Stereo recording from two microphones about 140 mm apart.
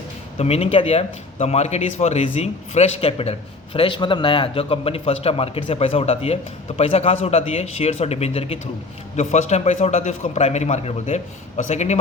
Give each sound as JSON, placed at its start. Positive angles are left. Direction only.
{"t": 0.3, "sound": "speech", "side_deg": 45}